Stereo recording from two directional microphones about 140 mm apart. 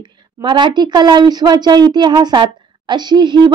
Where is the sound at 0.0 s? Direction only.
35° right (ahead or behind).